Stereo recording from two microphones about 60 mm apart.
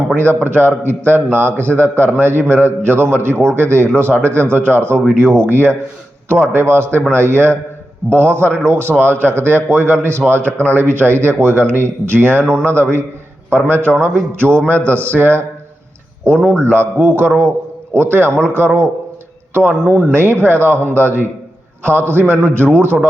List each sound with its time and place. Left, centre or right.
0.2 s a man's voice: right
16.3 s a man's voice: centre
16.7 s a man's voice: right
19.5 s a man's voice: right